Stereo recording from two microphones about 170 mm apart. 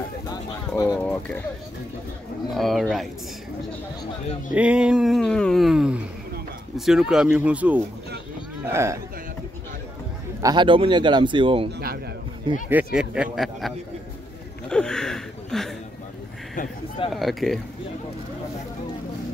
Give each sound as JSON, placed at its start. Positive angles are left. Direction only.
{"t": 0.9, "sound": "a sound", "side_deg": 10}
{"t": 2.5, "sound": "speech", "side_deg": 0}
{"t": 4.6, "sound": "a sound", "side_deg": -5}
{"t": 6.8, "sound": "speech", "side_deg": 0}
{"t": 10.4, "sound": "a man's voice", "side_deg": -25}
{"t": 12.6, "sound": "speech", "side_deg": -10}
{"t": 17.1, "sound": "speech", "side_deg": 0}